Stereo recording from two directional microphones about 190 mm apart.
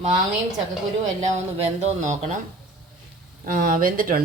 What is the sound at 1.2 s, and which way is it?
Speech, 35° right (ahead or behind).